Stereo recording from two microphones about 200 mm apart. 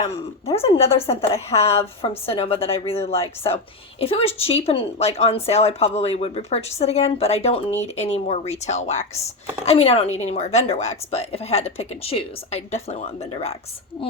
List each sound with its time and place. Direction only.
0.1 s a woman's voice: 30° left (ahead or behind)